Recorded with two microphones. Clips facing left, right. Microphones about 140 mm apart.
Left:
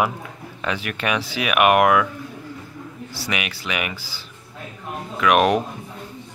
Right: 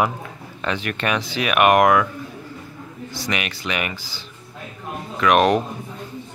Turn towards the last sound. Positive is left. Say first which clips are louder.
# right 1 dB
turn(degrees=5)  # may be behind; listen again after turning